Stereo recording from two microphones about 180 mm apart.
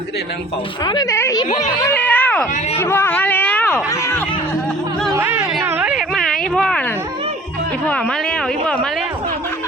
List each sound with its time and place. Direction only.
0.9 s a woman's voice: 20° left (ahead or behind)
5.1 s a sound: 10° right (ahead or behind)
7.9 s speech: 5° left (ahead or behind)